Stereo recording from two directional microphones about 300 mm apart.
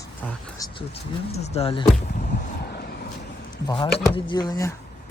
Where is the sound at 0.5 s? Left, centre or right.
Centre.